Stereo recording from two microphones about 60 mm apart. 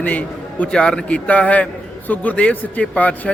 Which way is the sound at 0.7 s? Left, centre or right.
Centre.